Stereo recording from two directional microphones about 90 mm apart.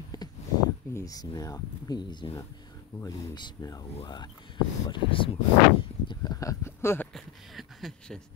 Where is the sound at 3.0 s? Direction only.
40° left (ahead or behind).